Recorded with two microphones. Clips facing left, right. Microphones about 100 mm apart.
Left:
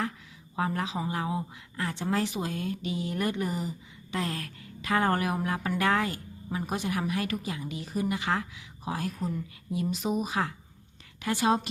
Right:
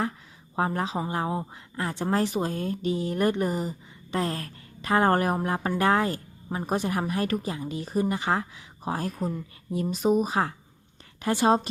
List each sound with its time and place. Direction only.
0.5 s speech: 35° right (ahead or behind)